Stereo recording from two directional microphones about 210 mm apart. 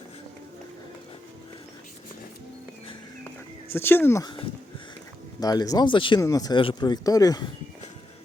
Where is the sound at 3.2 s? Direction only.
10° left (ahead or behind).